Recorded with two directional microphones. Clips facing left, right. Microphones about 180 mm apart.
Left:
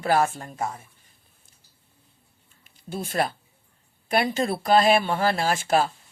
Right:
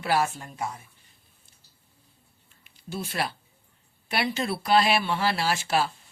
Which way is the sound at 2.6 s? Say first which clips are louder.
Left 2 dB; 45° left (ahead or behind).